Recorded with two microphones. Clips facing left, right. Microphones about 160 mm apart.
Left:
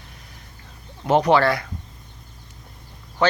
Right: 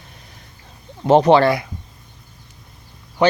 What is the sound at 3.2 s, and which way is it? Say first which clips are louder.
Speech: right 4 dB; 15° right (ahead or behind).